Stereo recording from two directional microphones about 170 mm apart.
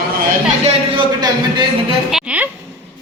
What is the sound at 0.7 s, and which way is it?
Speech, 25° right (ahead or behind).